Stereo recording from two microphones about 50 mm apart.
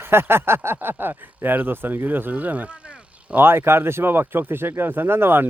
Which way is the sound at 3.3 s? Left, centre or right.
Right.